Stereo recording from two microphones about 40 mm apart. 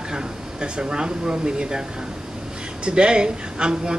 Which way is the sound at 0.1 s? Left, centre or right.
Centre.